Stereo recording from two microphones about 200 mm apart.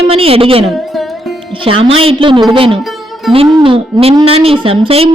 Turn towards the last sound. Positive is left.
turn(degrees=-30)  # may be behind; listen again after turning